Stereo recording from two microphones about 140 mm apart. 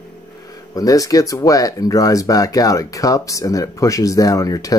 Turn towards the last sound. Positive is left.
turn(degrees=25)  # may be behind; listen again after turning